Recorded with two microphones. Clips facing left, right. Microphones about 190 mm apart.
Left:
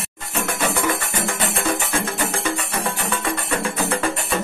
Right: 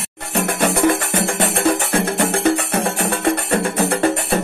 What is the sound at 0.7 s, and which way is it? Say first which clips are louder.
Music: right 9 dB; 35° right (ahead or behind).